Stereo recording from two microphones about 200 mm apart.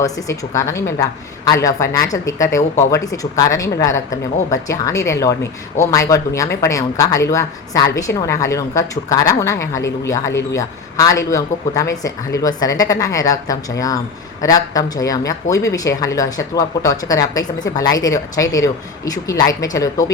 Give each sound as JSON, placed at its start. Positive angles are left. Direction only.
{"t": 0.0, "sound": "a woman's voice", "side_deg": 15}